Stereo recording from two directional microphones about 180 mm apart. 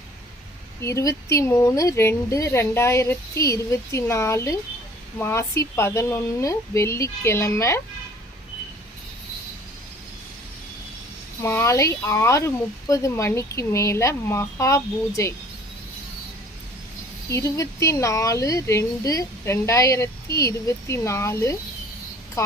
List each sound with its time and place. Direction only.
0.8 s speech: 15° left (ahead or behind)
11.4 s speech: 15° left (ahead or behind)
17.2 s a woman's voice: 15° left (ahead or behind)